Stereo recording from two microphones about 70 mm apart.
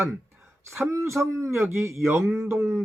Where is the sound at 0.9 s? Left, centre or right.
Right.